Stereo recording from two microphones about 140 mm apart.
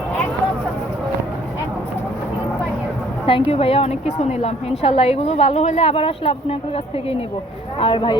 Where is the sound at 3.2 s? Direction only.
40° left (ahead or behind).